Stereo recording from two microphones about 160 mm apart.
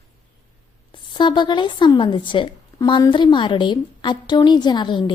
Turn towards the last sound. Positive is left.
turn(degrees=30)  # may be behind; listen again after turning